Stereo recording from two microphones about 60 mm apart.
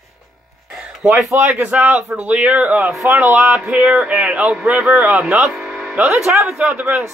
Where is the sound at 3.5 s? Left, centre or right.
Centre.